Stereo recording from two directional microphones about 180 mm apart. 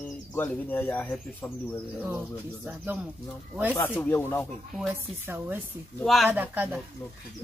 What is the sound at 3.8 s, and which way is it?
Speech, 10° left (ahead or behind).